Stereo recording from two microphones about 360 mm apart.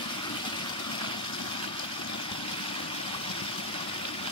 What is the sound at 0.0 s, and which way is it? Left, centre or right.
Vehicle, centre.